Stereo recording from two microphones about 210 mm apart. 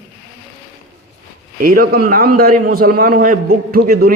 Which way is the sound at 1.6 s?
45° right (ahead or behind).